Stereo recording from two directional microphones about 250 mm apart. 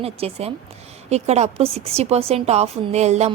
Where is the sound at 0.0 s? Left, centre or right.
Right.